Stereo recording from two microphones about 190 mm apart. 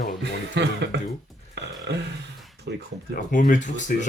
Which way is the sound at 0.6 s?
65° right (ahead or behind).